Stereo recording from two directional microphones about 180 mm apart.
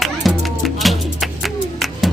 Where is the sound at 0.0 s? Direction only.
Centre (ahead or behind).